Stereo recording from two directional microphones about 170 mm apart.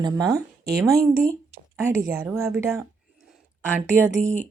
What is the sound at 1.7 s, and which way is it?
Speech, 15° right (ahead or behind).